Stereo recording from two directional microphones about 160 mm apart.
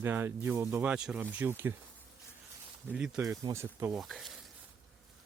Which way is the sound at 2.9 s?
10° right (ahead or behind).